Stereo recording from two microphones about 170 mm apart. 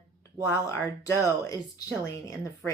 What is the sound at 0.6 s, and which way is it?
Speech, 15° left (ahead or behind).